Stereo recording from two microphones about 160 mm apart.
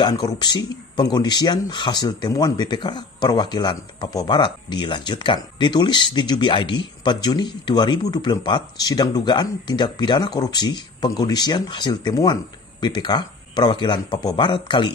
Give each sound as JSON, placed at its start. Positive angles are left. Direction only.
{"t": 0.0, "sound": "speech", "side_deg": 25}